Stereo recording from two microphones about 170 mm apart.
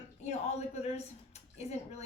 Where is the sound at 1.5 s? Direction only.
40° left (ahead or behind).